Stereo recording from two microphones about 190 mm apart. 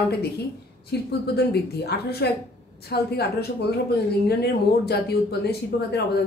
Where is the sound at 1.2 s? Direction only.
60° left (ahead or behind).